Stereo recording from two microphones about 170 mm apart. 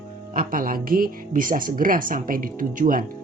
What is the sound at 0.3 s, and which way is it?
Speech, 55° right (ahead or behind).